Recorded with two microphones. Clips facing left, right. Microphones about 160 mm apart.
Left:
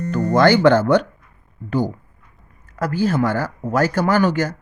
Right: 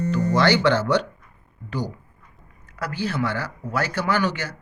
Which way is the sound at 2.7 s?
45° left (ahead or behind).